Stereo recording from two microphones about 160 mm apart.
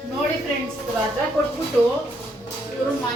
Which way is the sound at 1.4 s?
15° left (ahead or behind).